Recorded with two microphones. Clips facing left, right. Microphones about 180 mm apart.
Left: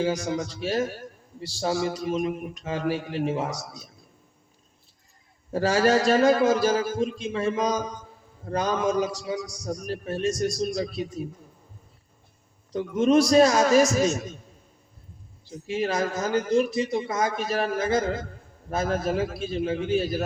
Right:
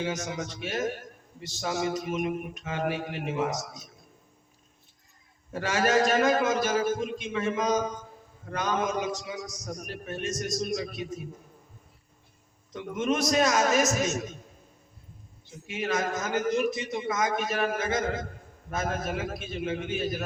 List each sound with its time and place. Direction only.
0.0 s a man's voice: 35° left (ahead or behind)
5.5 s a man's voice: 35° left (ahead or behind)
12.7 s a man's voice: 35° left (ahead or behind)
15.4 s a man's voice: 35° left (ahead or behind)